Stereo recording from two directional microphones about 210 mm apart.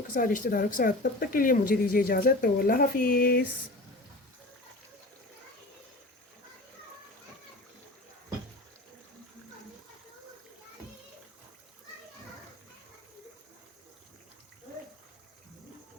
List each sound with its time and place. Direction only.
0.1 s speech: 40° left (ahead or behind)